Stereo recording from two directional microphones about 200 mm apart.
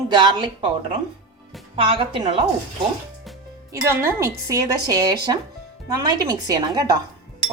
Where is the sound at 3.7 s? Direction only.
15° right (ahead or behind).